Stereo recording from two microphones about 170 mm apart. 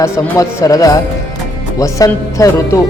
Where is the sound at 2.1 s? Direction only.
20° left (ahead or behind).